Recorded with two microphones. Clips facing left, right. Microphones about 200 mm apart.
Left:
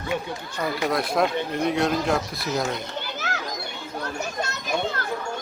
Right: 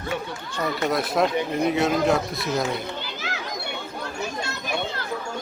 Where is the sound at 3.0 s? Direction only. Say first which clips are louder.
Left 1 dB; 50° left (ahead or behind).